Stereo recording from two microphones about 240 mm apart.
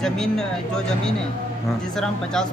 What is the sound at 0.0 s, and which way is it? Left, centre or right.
Speech, centre.